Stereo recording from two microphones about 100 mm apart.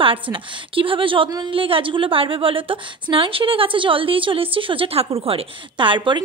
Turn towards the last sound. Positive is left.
turn(degrees=-55)  # may be behind; listen again after turning